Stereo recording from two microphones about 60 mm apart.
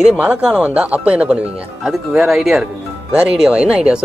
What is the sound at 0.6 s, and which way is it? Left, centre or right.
Speech, right.